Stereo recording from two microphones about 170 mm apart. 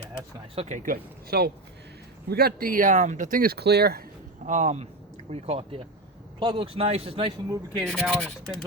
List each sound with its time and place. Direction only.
0.5 s speech: 35° right (ahead or behind)
0.8 s speech: 60° right (ahead or behind)
4.4 s speech: 45° right (ahead or behind); by 7.8 s 25° right (ahead or behind)
7.8 s speech: 5° left (ahead or behind)